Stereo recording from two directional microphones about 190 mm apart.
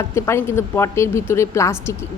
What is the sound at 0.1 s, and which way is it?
Speech, 15° left (ahead or behind).